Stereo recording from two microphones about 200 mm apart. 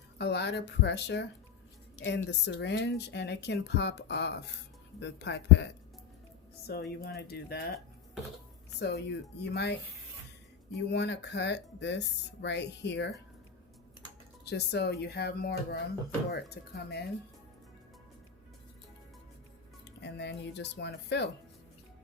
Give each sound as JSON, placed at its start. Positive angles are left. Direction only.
{"t": 0.2, "sound": "speech", "side_deg": 55}
{"t": 8.8, "sound": "speech", "side_deg": 55}
{"t": 14.5, "sound": "speech", "side_deg": 55}
{"t": 19.8, "sound": "speech", "side_deg": 60}